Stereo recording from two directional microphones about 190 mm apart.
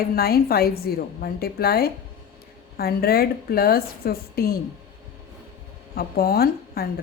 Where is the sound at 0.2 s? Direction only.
55° left (ahead or behind).